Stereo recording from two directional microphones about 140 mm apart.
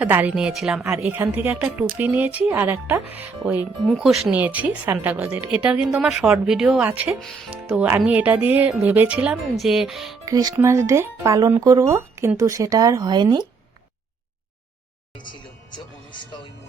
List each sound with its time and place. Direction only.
0.0 s speech: 10° right (ahead or behind)
7.2 s speech: centre (ahead or behind)
7.7 s speech: 15° right (ahead or behind)
10.2 s speech: 25° right (ahead or behind)
16.1 s music: 35° left (ahead or behind)